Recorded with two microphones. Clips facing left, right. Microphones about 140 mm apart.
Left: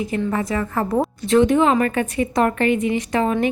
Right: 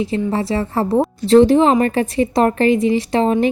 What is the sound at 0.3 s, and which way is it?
A woman's voice, 30° right (ahead or behind).